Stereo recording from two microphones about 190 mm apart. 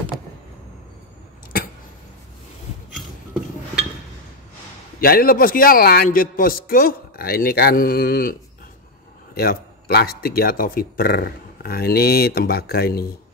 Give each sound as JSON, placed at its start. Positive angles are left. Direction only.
{"t": 5.0, "sound": "speech", "side_deg": 50}